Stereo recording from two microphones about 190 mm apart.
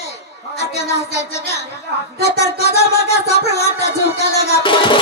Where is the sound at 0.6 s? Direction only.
35° left (ahead or behind).